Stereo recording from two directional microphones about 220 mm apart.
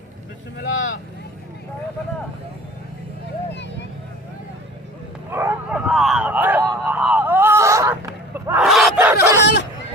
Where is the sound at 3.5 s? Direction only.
50° left (ahead or behind).